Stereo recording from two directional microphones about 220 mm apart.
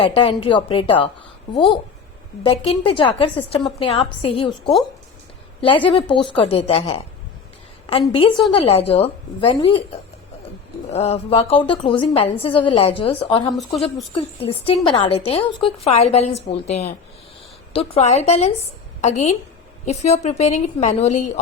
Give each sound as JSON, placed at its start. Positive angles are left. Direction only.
{"t": 0.0, "sound": "a woman's voice", "side_deg": 25}
{"t": 2.4, "sound": "a woman's voice", "side_deg": 25}
{"t": 13.6, "sound": "speech", "side_deg": 0}
{"t": 13.8, "sound": "a woman's voice", "side_deg": 25}